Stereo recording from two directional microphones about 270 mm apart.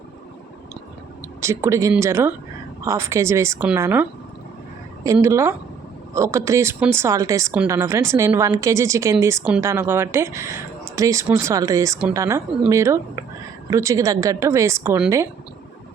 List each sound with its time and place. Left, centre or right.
1.4 s speech: centre
5.0 s speech: centre